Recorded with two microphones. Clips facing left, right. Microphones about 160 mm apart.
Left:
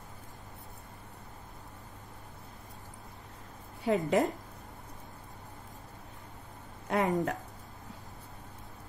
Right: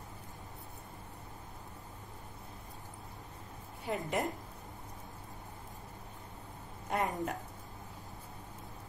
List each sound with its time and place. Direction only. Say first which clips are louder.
3.8 s speech: left 8 dB; 70° left (ahead or behind)
6.9 s speech: left 5 dB; 75° left (ahead or behind)